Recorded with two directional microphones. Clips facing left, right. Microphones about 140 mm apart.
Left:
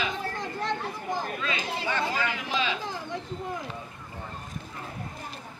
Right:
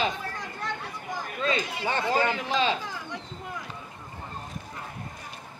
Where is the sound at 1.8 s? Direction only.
35° right (ahead or behind).